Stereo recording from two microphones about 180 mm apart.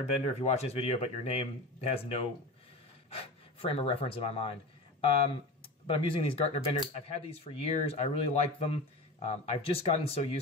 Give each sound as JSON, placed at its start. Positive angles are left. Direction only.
{"t": 0.0, "sound": "speech", "side_deg": 35}
{"t": 5.9, "sound": "speech", "side_deg": 30}